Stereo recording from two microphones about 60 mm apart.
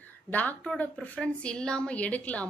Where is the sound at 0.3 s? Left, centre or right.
Left.